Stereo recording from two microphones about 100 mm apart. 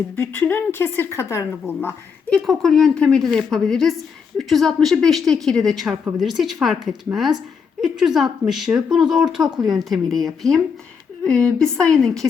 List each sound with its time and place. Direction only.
0.2 s a woman's voice: 20° left (ahead or behind)
2.3 s a woman's voice: centre (ahead or behind)